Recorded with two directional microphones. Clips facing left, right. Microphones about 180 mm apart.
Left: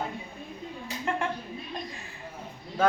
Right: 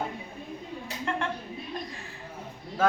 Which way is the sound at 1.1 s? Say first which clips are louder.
Left 1 dB; 10° left (ahead or behind).